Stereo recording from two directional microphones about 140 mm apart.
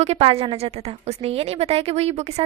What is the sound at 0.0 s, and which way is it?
A woman's voice, 45° right (ahead or behind).